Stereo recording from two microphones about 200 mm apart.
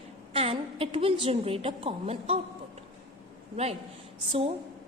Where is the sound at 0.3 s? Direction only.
30° right (ahead or behind).